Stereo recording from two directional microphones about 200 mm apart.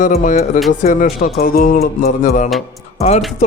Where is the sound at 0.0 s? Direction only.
40° left (ahead or behind).